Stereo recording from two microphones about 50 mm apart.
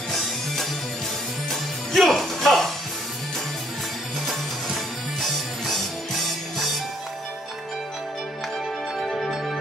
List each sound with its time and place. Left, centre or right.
0.1 s music: centre
5.2 s music: centre
9.0 s music: centre